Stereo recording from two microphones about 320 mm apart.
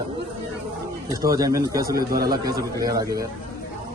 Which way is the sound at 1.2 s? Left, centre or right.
Centre.